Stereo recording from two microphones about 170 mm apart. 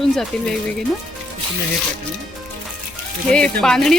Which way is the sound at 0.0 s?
5° left (ahead or behind).